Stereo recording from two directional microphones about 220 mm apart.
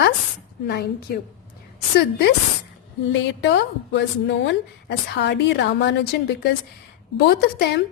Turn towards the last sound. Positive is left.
turn(degrees=50)  # may be behind; listen again after turning